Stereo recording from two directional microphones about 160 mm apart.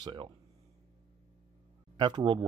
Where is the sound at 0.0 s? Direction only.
30° right (ahead or behind).